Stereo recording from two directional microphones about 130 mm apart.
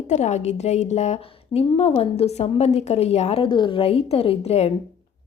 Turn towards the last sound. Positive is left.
turn(degrees=50)  # may be behind; listen again after turning